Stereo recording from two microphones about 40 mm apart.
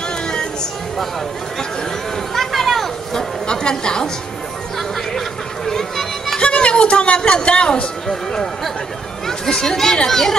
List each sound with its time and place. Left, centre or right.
2.3 s a sound: centre
3.4 s a woman's voice: centre
5.7 s children playing: centre
6.4 s a sound: left
7.2 s speech: centre
8.1 s speech: centre